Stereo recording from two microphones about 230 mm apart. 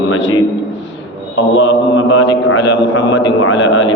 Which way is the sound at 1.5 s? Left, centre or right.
Left.